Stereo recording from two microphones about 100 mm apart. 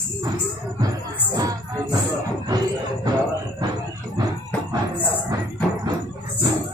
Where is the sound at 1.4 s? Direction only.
35° right (ahead or behind).